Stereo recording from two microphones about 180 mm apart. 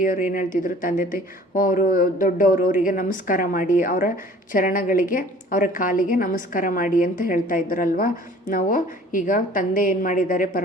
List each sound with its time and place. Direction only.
0.0 s a woman's voice: 50° left (ahead or behind)